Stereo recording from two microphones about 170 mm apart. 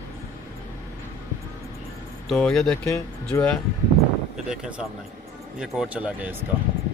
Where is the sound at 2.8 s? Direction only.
15° left (ahead or behind).